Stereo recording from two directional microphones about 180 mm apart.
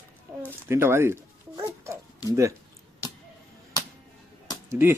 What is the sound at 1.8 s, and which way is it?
Bird, 15° right (ahead or behind).